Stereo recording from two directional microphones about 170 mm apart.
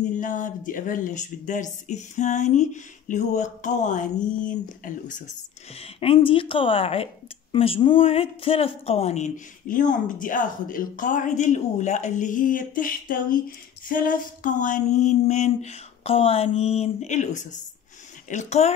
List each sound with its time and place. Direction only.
0.1 s speech: 50° left (ahead or behind)
5.8 s a woman's voice: 35° left (ahead or behind)